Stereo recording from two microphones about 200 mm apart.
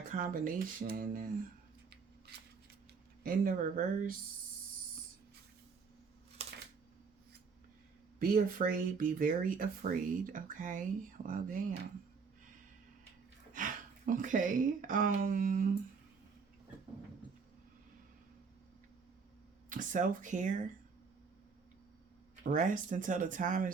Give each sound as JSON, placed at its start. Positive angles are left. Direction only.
{"t": 0.1, "sound": "speech", "side_deg": -45}
{"t": 3.2, "sound": "speech", "side_deg": -45}
{"t": 8.2, "sound": "speech", "side_deg": -45}
{"t": 13.5, "sound": "speech", "side_deg": -40}
{"t": 19.7, "sound": "speech", "side_deg": -40}
{"t": 22.4, "sound": "speech", "side_deg": -40}